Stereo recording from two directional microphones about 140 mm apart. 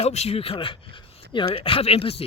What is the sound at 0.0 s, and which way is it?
Speech, 50° left (ahead or behind).